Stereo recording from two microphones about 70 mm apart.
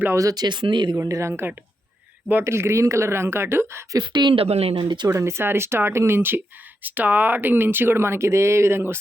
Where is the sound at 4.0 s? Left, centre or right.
Right.